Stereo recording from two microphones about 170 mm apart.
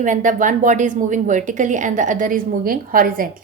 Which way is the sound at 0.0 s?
50° right (ahead or behind).